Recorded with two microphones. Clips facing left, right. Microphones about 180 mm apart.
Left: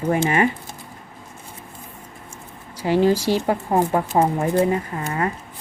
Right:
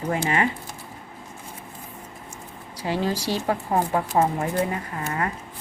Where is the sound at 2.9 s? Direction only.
30° left (ahead or behind).